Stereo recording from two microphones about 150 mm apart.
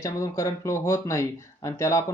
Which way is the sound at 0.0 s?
20° left (ahead or behind).